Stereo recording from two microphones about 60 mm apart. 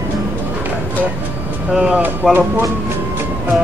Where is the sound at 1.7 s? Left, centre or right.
Centre.